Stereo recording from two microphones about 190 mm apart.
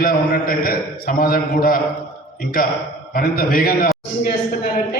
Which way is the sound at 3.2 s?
50° left (ahead or behind).